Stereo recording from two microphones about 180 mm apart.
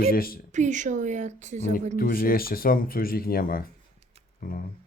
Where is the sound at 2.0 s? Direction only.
55° left (ahead or behind).